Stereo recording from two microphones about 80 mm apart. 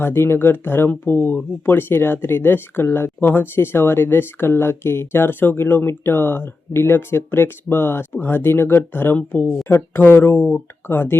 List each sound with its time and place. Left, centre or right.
0.0 s speech: left
9.6 s speech: left